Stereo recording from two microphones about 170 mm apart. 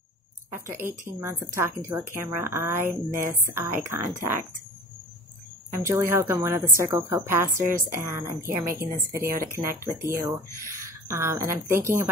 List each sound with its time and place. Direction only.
0.5 s speech: 15° right (ahead or behind)
5.7 s speech: 15° right (ahead or behind)